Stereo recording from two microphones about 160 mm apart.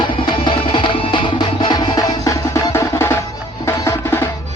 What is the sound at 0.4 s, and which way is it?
Music, 30° left (ahead or behind).